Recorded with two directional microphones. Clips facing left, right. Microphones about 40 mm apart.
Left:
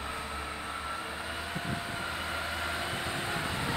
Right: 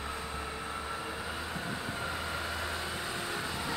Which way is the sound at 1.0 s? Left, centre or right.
Centre.